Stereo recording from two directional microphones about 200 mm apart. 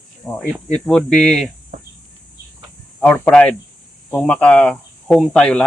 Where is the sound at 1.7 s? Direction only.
35° right (ahead or behind).